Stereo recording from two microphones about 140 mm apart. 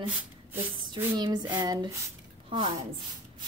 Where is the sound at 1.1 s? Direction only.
30° right (ahead or behind).